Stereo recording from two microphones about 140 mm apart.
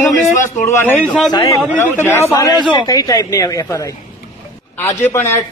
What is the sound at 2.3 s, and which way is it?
Speech, 30° left (ahead or behind).